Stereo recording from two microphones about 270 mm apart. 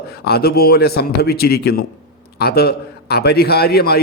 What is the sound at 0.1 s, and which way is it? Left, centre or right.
A man's voice, left.